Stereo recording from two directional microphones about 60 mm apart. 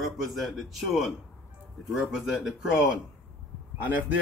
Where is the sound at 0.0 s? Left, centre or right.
Centre.